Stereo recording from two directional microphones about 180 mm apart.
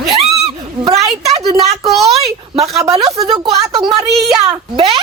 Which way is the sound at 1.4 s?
25° right (ahead or behind).